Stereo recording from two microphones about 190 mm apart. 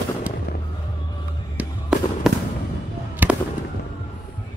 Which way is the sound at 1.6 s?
5° right (ahead or behind).